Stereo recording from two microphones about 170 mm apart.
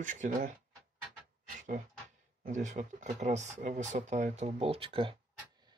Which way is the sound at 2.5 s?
45° right (ahead or behind).